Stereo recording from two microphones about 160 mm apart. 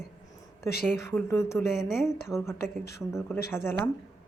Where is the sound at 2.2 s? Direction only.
15° left (ahead or behind).